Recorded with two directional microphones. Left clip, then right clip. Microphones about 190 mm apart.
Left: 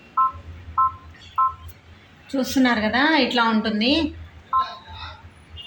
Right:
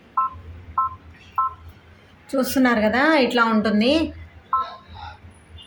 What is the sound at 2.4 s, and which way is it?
A woman's voice, 60° right (ahead or behind).